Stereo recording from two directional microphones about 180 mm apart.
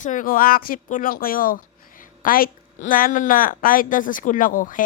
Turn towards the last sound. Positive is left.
turn(degrees=50)  # may be behind; listen again after turning